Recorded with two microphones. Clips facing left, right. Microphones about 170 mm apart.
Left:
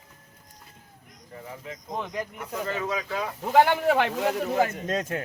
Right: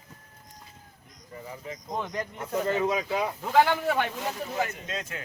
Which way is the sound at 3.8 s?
80° left.